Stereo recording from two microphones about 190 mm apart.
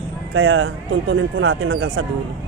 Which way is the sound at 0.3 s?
90° right.